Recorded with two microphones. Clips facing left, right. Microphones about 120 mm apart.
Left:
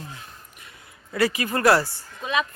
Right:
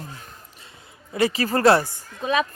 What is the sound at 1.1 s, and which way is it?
Speech, 25° right (ahead or behind).